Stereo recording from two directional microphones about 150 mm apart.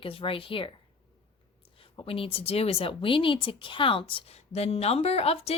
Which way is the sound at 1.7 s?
35° left (ahead or behind).